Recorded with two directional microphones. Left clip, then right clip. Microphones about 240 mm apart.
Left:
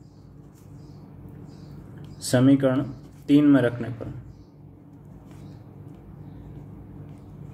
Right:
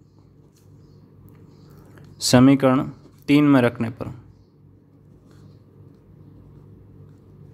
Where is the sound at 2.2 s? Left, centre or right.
Right.